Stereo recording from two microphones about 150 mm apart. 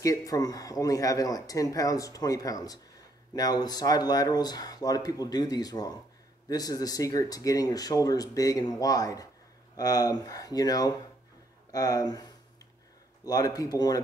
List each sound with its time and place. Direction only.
0.0 s speech: 25° left (ahead or behind)